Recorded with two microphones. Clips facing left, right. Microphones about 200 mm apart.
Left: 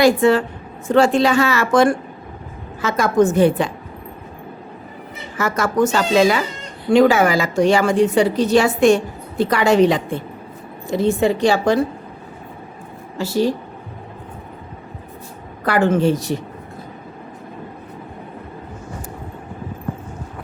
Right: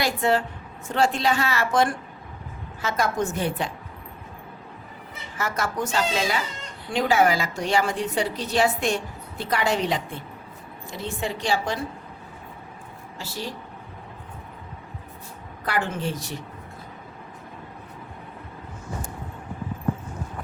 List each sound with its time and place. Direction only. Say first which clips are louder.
0.0 s a woman's voice: left 9 dB; 90° left
5.4 s a woman's voice: left 10 dB; 90° left
11.4 s a woman's voice: left 8 dB; 65° left (ahead or behind)
13.2 s speech: left 15 dB; 40° left (ahead or behind)
15.6 s a woman's voice: left 11 dB; 70° left (ahead or behind)
16.0 s speech: left 12 dB; 40° left (ahead or behind)